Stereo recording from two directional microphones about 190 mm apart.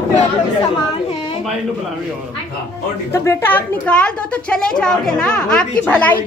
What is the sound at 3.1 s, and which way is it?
A woman's voice, 10° left (ahead or behind).